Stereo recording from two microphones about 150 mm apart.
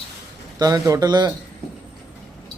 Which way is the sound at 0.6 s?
25° right (ahead or behind).